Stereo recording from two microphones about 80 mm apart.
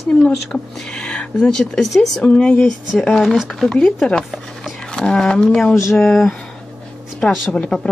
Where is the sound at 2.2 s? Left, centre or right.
Centre.